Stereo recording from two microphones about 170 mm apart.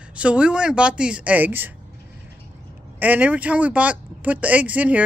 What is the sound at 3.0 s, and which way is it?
Speech, 10° right (ahead or behind).